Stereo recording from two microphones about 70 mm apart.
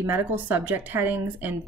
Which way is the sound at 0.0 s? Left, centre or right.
Right.